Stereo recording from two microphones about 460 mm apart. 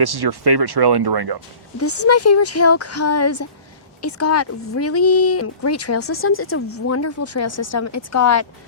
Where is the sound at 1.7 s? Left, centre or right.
Left.